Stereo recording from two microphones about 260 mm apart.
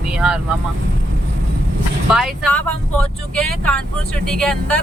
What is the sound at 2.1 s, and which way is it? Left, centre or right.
Speech, centre.